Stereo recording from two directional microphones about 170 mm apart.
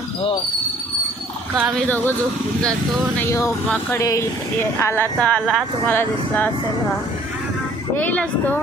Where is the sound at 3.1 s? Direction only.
15° left (ahead or behind).